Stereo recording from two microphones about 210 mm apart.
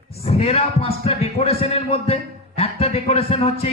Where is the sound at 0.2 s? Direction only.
30° left (ahead or behind).